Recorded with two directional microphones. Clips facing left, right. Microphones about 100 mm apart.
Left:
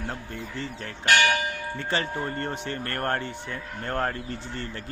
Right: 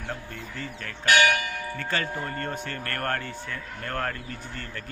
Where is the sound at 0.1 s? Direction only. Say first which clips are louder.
Left 1 dB; 25° left (ahead or behind).